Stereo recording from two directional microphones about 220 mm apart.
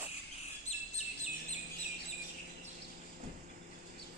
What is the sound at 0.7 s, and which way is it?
Chirp, 30° left (ahead or behind).